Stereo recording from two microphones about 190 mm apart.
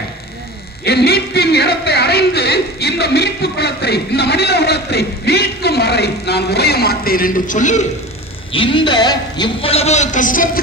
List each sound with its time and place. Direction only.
0.8 s a man's voice: 55° left (ahead or behind); by 7.9 s 40° left (ahead or behind)
8.5 s a man's voice: 25° left (ahead or behind); by 10.6 s 45° left (ahead or behind)